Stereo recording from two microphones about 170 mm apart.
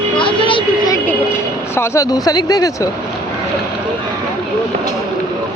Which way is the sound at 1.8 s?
20° left (ahead or behind).